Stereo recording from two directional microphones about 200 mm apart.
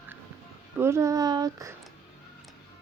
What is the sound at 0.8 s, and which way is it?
Speech, 15° right (ahead or behind).